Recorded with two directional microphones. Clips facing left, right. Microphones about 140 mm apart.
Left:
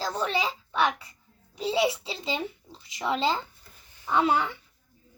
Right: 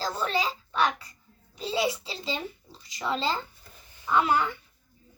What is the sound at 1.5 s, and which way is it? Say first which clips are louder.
A child's voice: left 3 dB; 20° left (ahead or behind).